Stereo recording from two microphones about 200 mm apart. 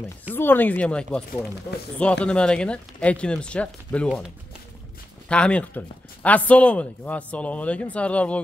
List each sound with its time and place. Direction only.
0.3 s speech: 10° left (ahead or behind)
5.3 s speech: 5° left (ahead or behind)